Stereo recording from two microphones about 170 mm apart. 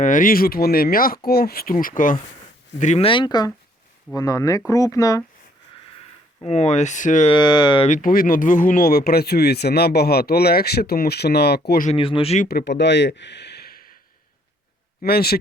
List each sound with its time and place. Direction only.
0.0 s speech: 50° left (ahead or behind)
3.1 s speech: 25° left (ahead or behind)
6.4 s speech: 40° left (ahead or behind)
7.3 s speech: 25° left (ahead or behind)
7.9 s speech: 50° left (ahead or behind); by 11.6 s 70° left (ahead or behind)
11.9 s speech: 30° left (ahead or behind)
12.5 s speech: 75° left (ahead or behind); by 13.9 s 60° left (ahead or behind)
15.0 s speech: 65° left (ahead or behind)